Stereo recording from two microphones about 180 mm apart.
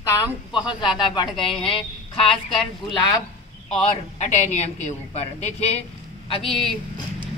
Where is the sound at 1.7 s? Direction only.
30° left (ahead or behind).